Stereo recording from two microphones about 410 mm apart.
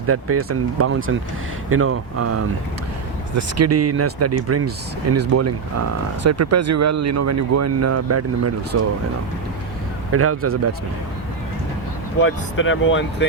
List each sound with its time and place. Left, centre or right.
0.1 s speech: right
3.6 s speech: right
10.1 s speech: right
12.2 s speech: left